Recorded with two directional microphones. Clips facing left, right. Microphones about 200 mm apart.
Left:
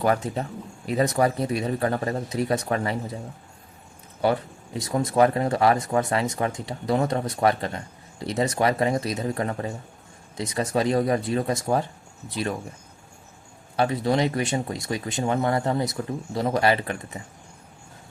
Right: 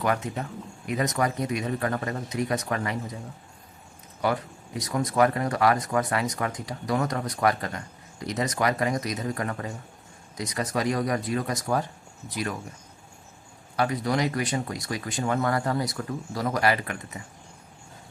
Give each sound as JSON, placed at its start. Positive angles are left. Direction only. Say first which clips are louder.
{"t": 0.0, "sound": "speech", "louder": "left 4 dB", "side_deg": 30}
{"t": 4.2, "sound": "speech", "louder": "left 4 dB", "side_deg": 30}
{"t": 13.7, "sound": "speech", "louder": "left 3 dB", "side_deg": 25}